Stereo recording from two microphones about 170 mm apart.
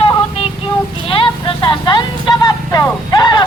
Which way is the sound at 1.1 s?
30° left (ahead or behind).